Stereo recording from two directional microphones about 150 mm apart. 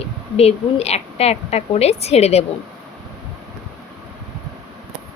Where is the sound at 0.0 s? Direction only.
45° left (ahead or behind).